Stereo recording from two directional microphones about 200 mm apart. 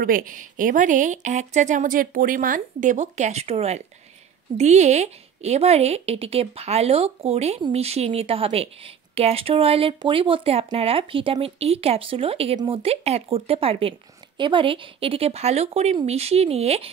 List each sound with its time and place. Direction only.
0.0 s a woman's voice: 45° right (ahead or behind)